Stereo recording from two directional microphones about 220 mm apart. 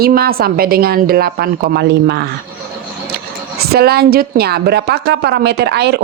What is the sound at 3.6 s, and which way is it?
Speech, 45° right (ahead or behind).